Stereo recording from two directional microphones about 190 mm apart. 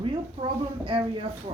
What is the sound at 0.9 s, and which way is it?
Speech, 30° right (ahead or behind).